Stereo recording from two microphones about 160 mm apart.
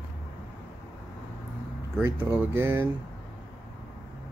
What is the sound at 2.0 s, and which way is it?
Speech, 10° right (ahead or behind).